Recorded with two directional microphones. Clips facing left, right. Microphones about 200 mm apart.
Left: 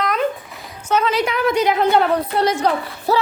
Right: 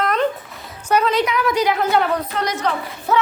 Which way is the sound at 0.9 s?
10° right (ahead or behind).